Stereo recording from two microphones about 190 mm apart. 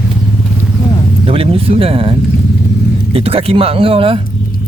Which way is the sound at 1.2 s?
30° right (ahead or behind).